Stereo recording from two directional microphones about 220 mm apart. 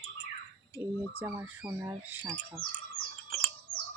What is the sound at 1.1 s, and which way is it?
Speech, 10° right (ahead or behind).